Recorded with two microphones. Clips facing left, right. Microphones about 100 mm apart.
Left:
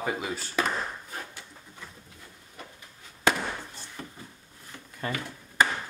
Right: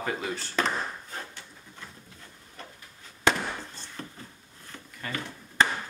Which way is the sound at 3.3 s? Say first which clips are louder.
Even; 10° left (ahead or behind).